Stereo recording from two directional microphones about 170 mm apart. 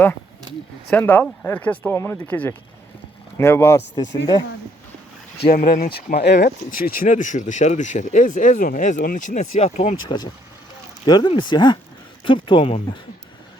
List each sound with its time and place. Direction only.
0.9 s speech: 10° left (ahead or behind)
5.5 s speech: 55° left (ahead or behind); by 6.4 s 75° left (ahead or behind)
6.4 s speech: 55° left (ahead or behind)
10.1 s speech: 30° left (ahead or behind)